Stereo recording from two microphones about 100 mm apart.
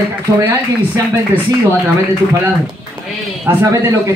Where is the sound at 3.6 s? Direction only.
30° right (ahead or behind).